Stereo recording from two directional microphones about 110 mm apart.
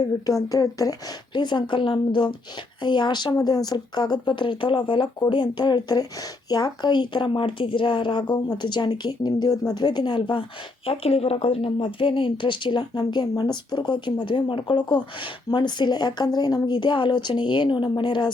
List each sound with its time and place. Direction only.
0.0 s a woman's voice: 35° left (ahead or behind)
10.8 s speech: 60° left (ahead or behind)